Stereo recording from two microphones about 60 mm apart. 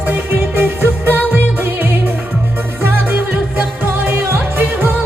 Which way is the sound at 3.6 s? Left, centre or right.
Right.